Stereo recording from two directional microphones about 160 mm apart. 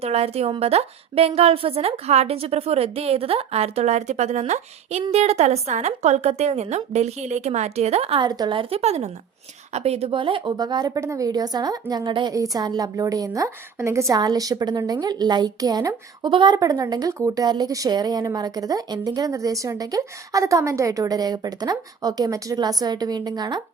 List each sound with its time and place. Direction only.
0.0 s a woman's voice: 40° right (ahead or behind); by 23.6 s 25° right (ahead or behind)